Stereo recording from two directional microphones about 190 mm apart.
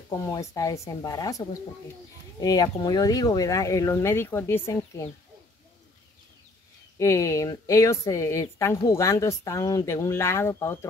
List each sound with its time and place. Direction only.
0.1 s a woman's voice: 15° left (ahead or behind)
2.4 s a woman's voice: 20° left (ahead or behind)
7.0 s a woman's voice: 15° left (ahead or behind)